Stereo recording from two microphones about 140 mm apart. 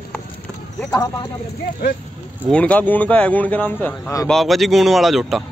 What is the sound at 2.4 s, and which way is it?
Speech, 10° left (ahead or behind).